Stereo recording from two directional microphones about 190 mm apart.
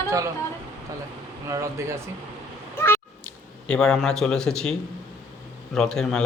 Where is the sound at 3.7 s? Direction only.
5° left (ahead or behind).